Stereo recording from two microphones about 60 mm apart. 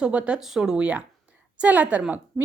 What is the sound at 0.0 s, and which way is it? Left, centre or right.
Speech, right.